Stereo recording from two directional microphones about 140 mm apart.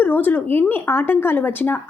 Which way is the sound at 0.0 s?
10° left (ahead or behind).